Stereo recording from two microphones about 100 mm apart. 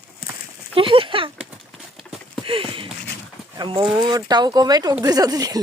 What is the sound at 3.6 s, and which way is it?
Speech, 50° right (ahead or behind).